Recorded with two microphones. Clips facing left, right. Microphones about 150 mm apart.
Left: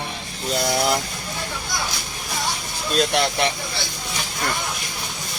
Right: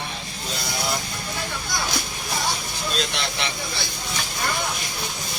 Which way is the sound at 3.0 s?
55° left (ahead or behind).